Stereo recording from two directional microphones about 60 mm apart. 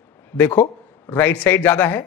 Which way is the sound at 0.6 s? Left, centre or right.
Left.